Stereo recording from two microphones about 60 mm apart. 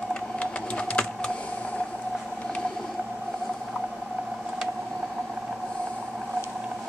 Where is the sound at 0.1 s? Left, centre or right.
Centre.